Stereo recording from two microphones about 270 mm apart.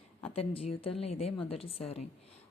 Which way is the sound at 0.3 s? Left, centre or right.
Left.